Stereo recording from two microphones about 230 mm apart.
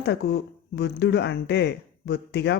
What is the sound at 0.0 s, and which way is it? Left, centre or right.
Speech, left.